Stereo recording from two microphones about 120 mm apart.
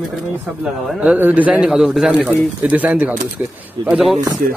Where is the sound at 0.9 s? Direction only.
10° right (ahead or behind).